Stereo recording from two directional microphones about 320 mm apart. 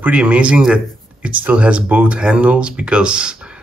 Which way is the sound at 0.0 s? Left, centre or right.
Centre.